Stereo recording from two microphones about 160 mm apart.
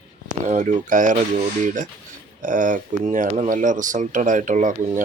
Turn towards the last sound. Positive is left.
turn(degrees=-55)  # may be behind; listen again after turning